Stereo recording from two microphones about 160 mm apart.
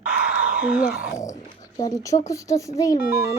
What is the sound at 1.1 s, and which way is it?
Dog, 20° left (ahead or behind).